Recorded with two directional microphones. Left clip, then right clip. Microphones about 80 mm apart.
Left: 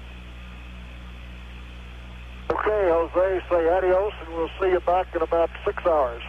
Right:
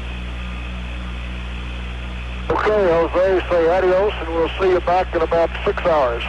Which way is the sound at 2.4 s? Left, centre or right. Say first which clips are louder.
Right 5 dB; left.